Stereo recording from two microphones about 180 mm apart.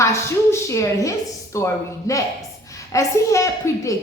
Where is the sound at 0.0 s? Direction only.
15° left (ahead or behind).